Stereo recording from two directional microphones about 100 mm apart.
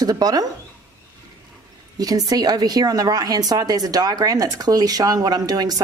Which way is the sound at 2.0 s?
40° right (ahead or behind).